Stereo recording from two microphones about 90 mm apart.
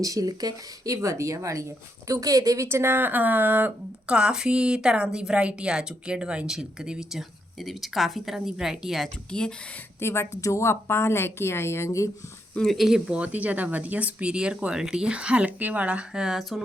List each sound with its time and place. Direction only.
0.0 s speech: 40° right (ahead or behind); by 9.0 s 5° right (ahead or behind)
9.3 s speech: 10° left (ahead or behind)
10.0 s a woman's voice: 30° left (ahead or behind)
12.5 s speech: centre (ahead or behind)